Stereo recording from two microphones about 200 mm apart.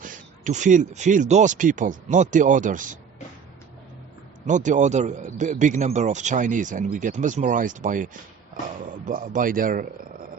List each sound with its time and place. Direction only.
0.0 s a man's voice: 40° right (ahead or behind)
4.4 s a man's voice: 40° right (ahead or behind)